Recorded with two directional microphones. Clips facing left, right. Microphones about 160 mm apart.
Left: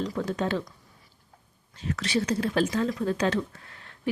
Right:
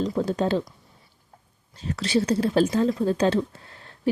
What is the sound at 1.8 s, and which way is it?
Speech, 30° right (ahead or behind).